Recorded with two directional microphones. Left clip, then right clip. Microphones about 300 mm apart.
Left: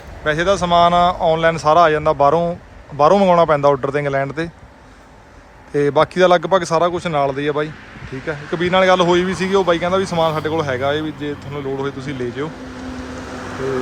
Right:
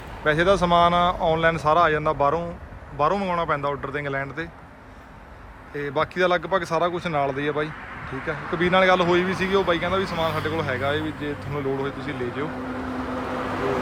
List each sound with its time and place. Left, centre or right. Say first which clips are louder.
0.3 s speech: left 3 dB; centre
5.7 s speech: left 10 dB; centre